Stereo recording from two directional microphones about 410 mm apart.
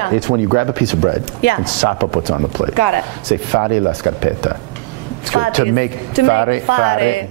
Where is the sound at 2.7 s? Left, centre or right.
Left.